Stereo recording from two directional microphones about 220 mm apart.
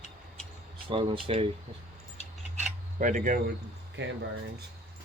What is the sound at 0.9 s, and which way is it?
Speech, 25° right (ahead or behind).